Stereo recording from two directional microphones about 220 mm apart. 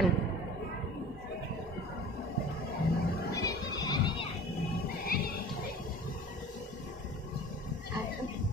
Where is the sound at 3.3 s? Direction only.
15° left (ahead or behind).